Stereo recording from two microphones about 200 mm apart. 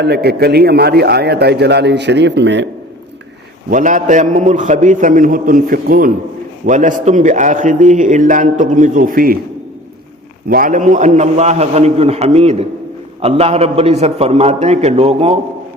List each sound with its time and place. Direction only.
0.0 s a man's voice: 55° right (ahead or behind)
3.7 s a man's voice: 40° right (ahead or behind)
10.5 s a man's voice: 40° right (ahead or behind)